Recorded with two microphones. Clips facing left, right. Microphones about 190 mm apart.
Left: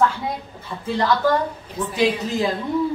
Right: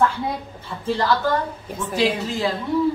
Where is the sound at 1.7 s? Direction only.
15° left (ahead or behind).